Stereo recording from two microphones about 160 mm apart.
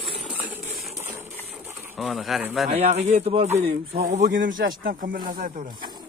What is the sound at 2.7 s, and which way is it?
Speech, 40° right (ahead or behind).